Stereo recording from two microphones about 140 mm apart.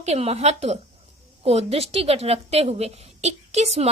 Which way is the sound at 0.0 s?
50° right (ahead or behind).